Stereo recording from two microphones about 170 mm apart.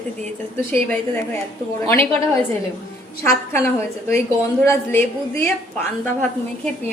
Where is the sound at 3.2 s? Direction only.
15° left (ahead or behind).